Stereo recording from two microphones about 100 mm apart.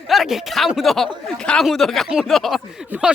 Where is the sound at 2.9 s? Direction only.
20° right (ahead or behind).